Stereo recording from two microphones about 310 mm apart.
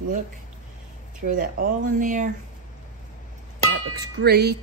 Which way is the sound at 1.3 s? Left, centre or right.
Right.